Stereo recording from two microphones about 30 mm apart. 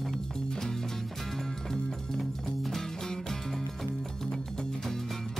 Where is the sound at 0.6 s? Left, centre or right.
Centre.